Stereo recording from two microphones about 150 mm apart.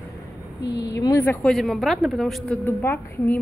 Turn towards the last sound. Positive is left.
turn(degrees=15)  # may be behind; listen again after turning